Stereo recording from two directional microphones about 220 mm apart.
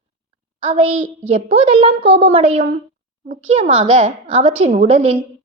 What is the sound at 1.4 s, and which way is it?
A woman's voice, 25° right (ahead or behind).